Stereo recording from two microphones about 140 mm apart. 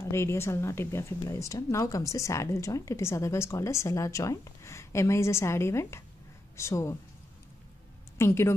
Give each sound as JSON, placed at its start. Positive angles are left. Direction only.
{"t": 0.0, "sound": "speech", "side_deg": 20}
{"t": 8.2, "sound": "speech", "side_deg": 20}